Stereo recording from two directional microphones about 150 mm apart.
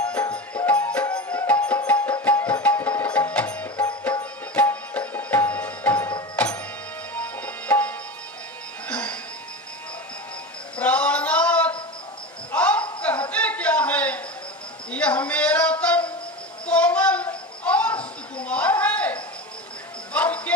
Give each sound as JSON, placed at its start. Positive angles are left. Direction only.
{"t": 0.2, "sound": "music", "side_deg": 20}
{"t": 0.7, "sound": "music", "side_deg": 10}
{"t": 10.8, "sound": "a sound", "side_deg": 10}
{"t": 20.1, "sound": "music", "side_deg": 10}